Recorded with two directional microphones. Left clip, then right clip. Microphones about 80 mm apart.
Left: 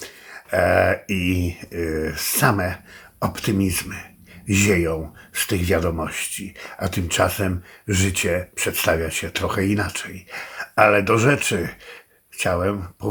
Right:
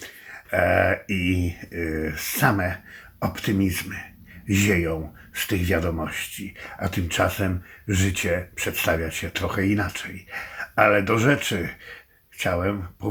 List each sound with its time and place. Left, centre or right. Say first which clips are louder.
0.0 s speech: left 2 dB; centre